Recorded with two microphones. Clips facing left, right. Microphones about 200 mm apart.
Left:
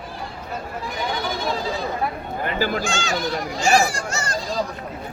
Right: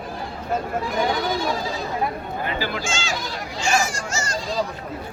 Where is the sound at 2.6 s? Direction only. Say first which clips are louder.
Left 4 dB; 45° left (ahead or behind).